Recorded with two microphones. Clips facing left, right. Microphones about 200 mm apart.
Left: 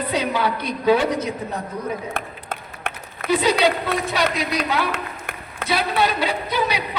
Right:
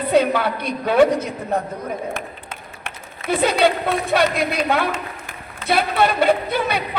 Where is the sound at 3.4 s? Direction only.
55° right (ahead or behind).